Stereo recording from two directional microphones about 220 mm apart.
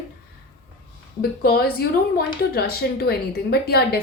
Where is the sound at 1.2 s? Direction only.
45° left (ahead or behind).